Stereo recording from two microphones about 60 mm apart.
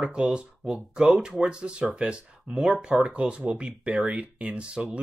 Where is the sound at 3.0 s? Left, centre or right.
Centre.